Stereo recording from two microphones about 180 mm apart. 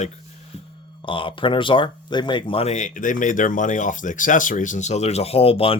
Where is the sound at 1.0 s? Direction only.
30° left (ahead or behind).